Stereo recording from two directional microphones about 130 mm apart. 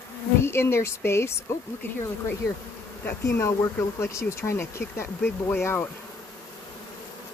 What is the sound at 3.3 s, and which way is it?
Speech, 20° left (ahead or behind).